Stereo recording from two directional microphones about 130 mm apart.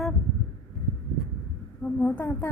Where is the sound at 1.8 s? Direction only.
15° left (ahead or behind).